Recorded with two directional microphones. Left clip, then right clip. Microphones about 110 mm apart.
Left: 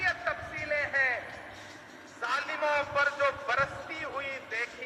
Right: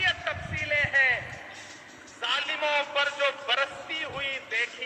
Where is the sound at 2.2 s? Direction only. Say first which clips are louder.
Right 3 dB; 15° right (ahead or behind).